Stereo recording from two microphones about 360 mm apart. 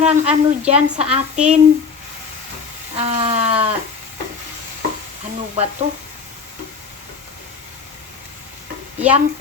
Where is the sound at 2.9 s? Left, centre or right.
Centre.